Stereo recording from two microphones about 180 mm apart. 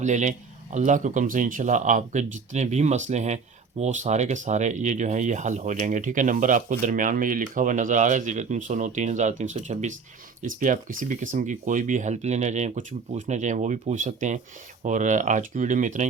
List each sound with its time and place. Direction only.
0.0 s speech: 40° right (ahead or behind)